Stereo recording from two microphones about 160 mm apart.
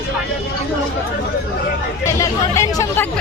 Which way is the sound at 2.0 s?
20° left (ahead or behind).